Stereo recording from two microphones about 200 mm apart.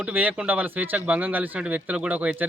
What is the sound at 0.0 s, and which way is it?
Speech, 5° right (ahead or behind).